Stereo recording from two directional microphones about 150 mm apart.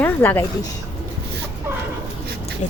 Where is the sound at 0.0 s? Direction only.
15° left (ahead or behind).